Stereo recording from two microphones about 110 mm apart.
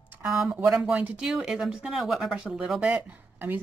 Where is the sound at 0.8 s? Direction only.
10° right (ahead or behind).